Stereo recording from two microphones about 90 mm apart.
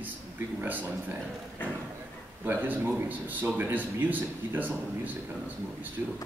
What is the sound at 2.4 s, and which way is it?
A man's voice, 20° right (ahead or behind).